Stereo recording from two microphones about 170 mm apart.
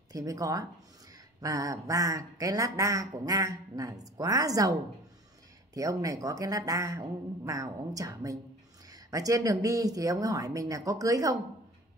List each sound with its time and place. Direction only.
0.1 s speech: 20° right (ahead or behind)
5.8 s speech: 20° right (ahead or behind)